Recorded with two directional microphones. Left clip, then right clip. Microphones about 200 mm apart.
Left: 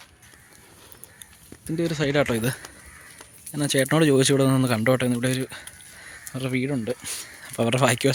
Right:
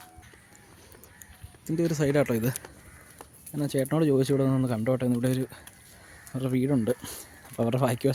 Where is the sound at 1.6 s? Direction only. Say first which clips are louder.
Left 2 dB; 10° right (ahead or behind); by 5.0 s 10° left (ahead or behind).